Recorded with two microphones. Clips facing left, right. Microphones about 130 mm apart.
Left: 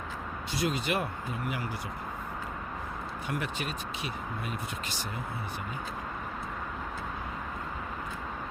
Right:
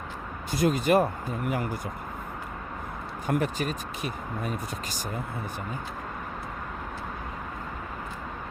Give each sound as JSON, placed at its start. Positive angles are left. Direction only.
{"t": 0.5, "sound": "speech", "side_deg": -45}
{"t": 3.2, "sound": "speech", "side_deg": -40}